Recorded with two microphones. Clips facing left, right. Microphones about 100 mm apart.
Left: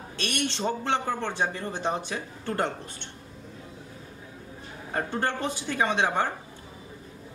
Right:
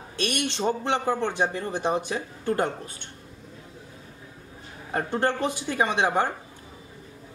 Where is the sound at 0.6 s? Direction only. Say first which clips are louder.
Right 3 dB; 15° right (ahead or behind).